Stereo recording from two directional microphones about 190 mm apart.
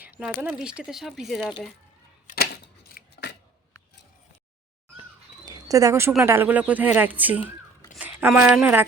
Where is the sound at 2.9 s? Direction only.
60° left (ahead or behind).